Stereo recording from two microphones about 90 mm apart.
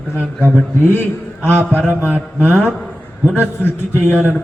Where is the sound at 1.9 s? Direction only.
20° right (ahead or behind).